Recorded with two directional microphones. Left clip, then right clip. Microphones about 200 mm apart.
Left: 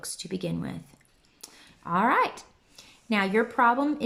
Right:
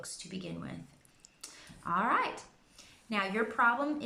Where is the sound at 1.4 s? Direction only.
50° left (ahead or behind).